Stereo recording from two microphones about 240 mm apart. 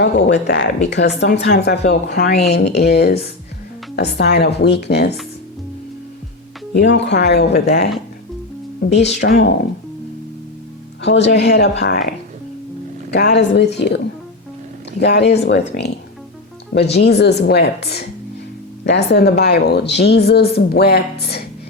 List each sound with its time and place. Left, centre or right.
0.0 s a woman's voice: left
6.7 s a woman's voice: left
8.9 s a woman's voice: left
11.0 s a woman's voice: left